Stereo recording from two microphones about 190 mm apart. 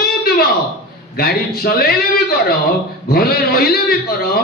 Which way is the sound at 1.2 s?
55° left (ahead or behind).